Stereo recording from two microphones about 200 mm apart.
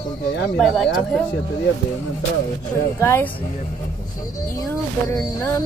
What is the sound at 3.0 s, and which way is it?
Speech, 10° left (ahead or behind).